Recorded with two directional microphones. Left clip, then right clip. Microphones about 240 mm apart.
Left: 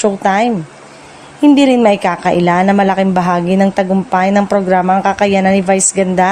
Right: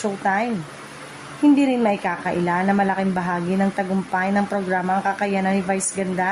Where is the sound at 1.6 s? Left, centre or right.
Left.